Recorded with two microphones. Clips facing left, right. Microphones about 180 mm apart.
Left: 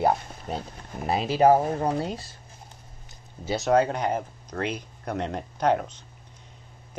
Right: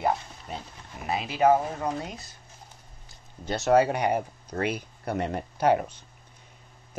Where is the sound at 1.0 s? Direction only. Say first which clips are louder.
Left 3 dB; 35° left (ahead or behind).